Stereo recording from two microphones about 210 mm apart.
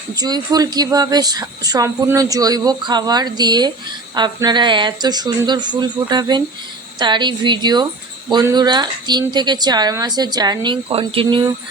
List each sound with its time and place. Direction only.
0.2 s speech: 20° right (ahead or behind)